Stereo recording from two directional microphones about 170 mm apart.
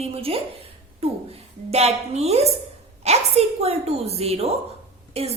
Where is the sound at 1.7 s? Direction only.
40° right (ahead or behind).